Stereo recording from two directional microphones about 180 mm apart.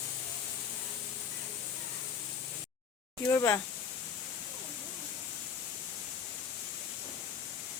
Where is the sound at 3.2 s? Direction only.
15° left (ahead or behind).